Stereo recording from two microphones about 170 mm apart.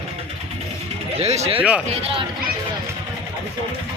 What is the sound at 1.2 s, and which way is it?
Speech, 40° right (ahead or behind).